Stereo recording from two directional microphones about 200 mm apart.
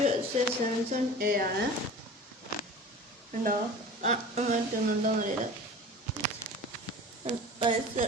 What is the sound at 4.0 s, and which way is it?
Speech, 35° right (ahead or behind).